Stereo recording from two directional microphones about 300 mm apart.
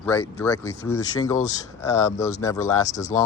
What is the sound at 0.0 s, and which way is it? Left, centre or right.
Speech, centre.